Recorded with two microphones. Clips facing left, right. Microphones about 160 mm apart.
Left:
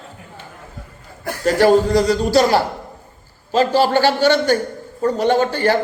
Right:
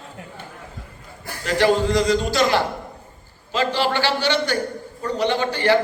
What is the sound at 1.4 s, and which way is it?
A man's voice, 40° left (ahead or behind).